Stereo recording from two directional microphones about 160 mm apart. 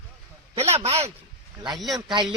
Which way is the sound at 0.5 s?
40° right (ahead or behind).